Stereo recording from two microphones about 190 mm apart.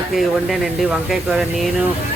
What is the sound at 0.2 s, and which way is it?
Speech, centre (ahead or behind).